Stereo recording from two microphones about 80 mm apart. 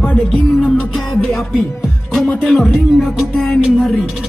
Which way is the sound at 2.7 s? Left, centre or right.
Centre.